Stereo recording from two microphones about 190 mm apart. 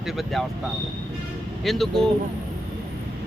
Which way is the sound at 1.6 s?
Centre (ahead or behind).